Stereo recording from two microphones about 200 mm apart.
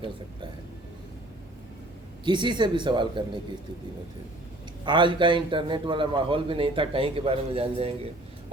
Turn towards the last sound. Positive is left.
turn(degrees=-30)  # may be behind; listen again after turning